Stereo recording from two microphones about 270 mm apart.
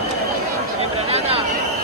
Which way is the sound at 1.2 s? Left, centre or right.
Right.